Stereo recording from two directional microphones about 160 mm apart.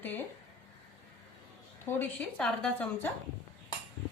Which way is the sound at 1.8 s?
10° left (ahead or behind).